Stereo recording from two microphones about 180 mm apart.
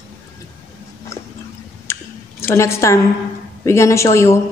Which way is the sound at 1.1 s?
15° left (ahead or behind).